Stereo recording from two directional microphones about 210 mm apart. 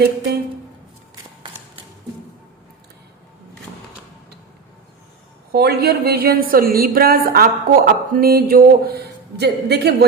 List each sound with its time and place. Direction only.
5.5 s a woman's voice: 50° right (ahead or behind)